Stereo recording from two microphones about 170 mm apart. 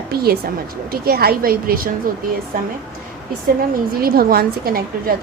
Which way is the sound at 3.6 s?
60° right (ahead or behind).